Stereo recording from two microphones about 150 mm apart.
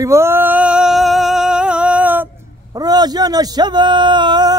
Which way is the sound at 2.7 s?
25° right (ahead or behind).